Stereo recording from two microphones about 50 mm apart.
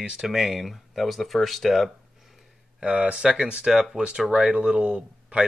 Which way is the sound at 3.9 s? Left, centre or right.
Centre.